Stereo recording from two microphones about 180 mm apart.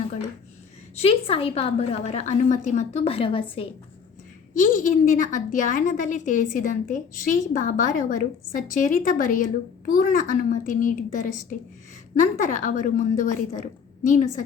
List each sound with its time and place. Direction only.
0.9 s a woman's voice: 35° left (ahead or behind)
4.5 s a woman's voice: 45° left (ahead or behind)